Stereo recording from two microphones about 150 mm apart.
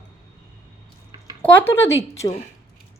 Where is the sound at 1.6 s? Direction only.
15° left (ahead or behind).